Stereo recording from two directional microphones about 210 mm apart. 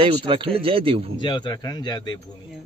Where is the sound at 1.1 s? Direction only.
20° left (ahead or behind).